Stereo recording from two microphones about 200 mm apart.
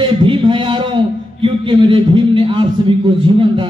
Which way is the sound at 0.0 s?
25° right (ahead or behind).